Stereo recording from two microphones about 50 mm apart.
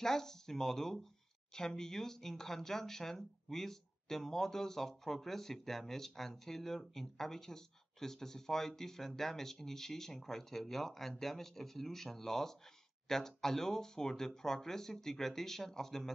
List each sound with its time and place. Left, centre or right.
0.0 s speech: centre